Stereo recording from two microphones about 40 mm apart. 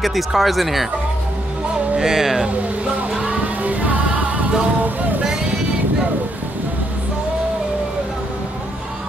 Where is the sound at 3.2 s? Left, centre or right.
Right.